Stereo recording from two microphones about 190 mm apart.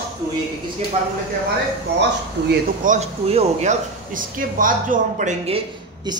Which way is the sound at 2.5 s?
40° right (ahead or behind).